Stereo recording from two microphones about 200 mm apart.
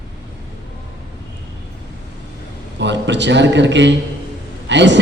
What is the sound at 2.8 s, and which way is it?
A man's voice, 60° right (ahead or behind).